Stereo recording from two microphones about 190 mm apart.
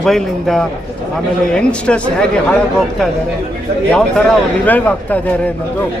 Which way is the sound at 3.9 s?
5° left (ahead or behind).